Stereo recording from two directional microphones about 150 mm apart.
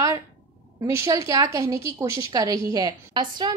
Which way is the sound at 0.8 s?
20° right (ahead or behind).